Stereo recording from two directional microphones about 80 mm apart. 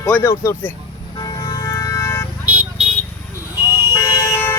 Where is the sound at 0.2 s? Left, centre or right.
Left.